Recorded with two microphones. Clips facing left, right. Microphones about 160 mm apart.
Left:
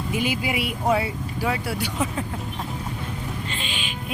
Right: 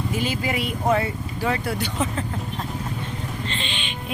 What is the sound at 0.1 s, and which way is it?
Speech, 15° left (ahead or behind).